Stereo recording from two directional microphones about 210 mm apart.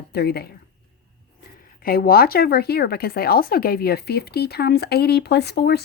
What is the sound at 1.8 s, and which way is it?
Speech, 45° left (ahead or behind).